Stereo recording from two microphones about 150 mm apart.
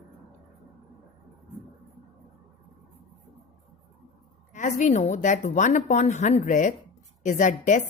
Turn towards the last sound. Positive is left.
turn(degrees=55)  # may be behind; listen again after turning